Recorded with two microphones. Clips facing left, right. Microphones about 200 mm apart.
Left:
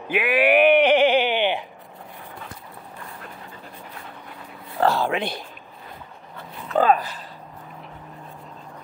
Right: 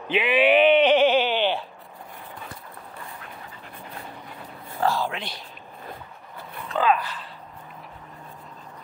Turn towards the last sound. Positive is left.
turn(degrees=45)  # may be behind; listen again after turning